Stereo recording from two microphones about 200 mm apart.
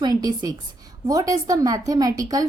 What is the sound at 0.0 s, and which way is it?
A woman's voice, 20° right (ahead or behind).